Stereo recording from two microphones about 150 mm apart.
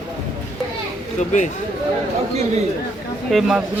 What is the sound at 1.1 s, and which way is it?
Speech, 55° left (ahead or behind).